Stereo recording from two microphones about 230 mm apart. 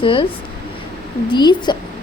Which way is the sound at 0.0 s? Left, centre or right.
Left.